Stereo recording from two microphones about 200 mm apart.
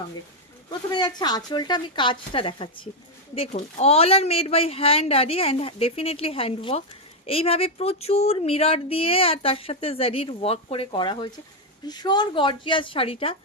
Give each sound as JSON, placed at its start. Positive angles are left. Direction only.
{"t": 0.9, "sound": "speech", "side_deg": 20}